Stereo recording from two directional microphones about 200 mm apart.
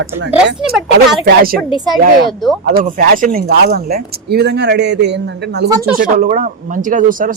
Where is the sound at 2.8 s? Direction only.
45° right (ahead or behind).